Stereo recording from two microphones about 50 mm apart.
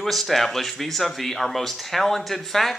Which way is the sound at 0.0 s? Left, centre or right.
Centre.